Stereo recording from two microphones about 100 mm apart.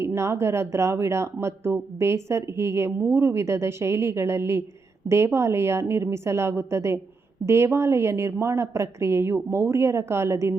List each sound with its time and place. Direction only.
0.0 s speech: 25° right (ahead or behind)